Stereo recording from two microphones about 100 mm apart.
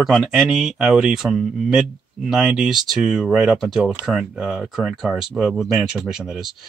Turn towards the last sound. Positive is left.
turn(degrees=-5)  # may be behind; listen again after turning